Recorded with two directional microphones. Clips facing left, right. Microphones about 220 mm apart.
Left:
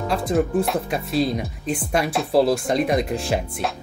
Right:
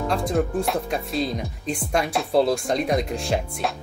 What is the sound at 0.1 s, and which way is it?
Speech, 5° left (ahead or behind).